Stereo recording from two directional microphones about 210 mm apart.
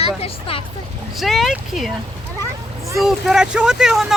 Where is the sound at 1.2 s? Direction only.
Centre (ahead or behind).